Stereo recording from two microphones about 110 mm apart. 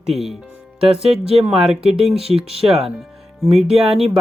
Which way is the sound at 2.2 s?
65° right (ahead or behind).